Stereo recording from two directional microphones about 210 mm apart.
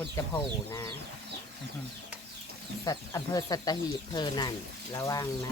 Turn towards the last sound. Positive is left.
turn(degrees=15)  # may be behind; listen again after turning